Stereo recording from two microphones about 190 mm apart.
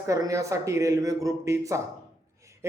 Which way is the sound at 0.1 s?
15° right (ahead or behind).